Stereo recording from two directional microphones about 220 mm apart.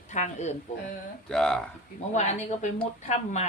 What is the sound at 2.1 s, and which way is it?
A woman's voice, 30° left (ahead or behind).